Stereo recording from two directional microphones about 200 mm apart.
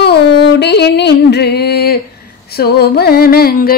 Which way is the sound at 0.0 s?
55° left (ahead or behind).